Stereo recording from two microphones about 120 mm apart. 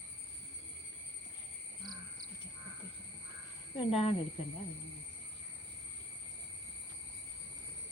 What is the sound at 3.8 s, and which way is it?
Speech, 55° left (ahead or behind).